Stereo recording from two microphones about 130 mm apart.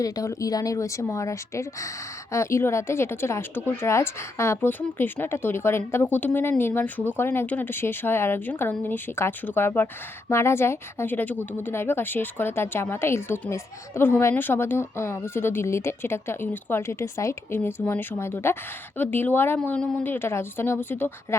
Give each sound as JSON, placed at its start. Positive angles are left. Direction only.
{"t": 0.0, "sound": "speech", "side_deg": 25}